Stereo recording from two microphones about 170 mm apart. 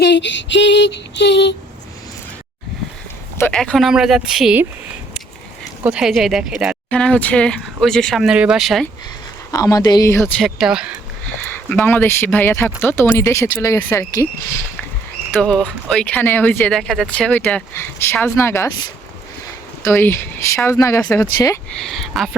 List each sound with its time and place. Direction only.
0.0 s a sound: 90° left
3.3 s speech: 10° left (ahead or behind)
5.8 s speech: 5° right (ahead or behind)
6.9 s speech: 5° left (ahead or behind)
9.5 s speech: 20° left (ahead or behind)
10.2 s speech: 5° left (ahead or behind)
11.3 s speech: 10° left (ahead or behind)
15.3 s speech: 5° left (ahead or behind)
21.8 s speech: centre (ahead or behind)